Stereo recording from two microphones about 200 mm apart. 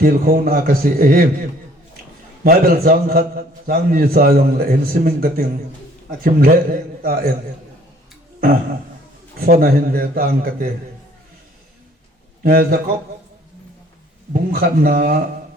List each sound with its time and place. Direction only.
0.0 s a man's voice: 45° right (ahead or behind)
2.4 s a man's voice: 50° right (ahead or behind)
9.4 s a man's voice: 45° right (ahead or behind)
12.4 s a man's voice: 50° right (ahead or behind)
14.3 s a man's voice: 45° right (ahead or behind)